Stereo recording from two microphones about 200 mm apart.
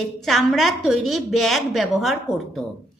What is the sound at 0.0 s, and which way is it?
A woman's voice, centre (ahead or behind).